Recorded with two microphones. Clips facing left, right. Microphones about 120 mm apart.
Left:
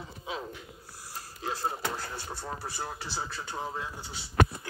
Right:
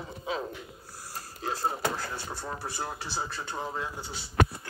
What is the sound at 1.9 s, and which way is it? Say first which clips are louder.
Speech: right 2 dB; centre (ahead or behind).